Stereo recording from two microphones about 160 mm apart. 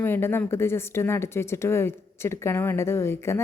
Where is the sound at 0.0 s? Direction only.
15° left (ahead or behind).